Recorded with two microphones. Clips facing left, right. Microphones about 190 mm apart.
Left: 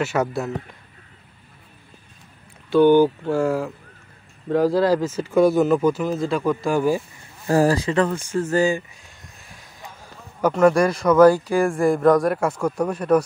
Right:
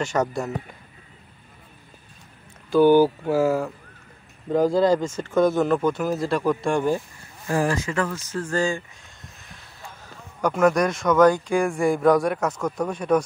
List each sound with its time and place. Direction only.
0.0 s speech: 5° left (ahead or behind)
2.7 s speech: 5° right (ahead or behind)
7.4 s speech: 35° left (ahead or behind)
8.4 s speech: 20° left (ahead or behind)
10.4 s speech: 5° left (ahead or behind)